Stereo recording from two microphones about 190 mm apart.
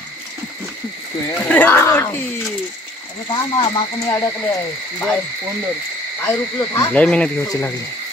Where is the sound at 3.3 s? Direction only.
20° left (ahead or behind).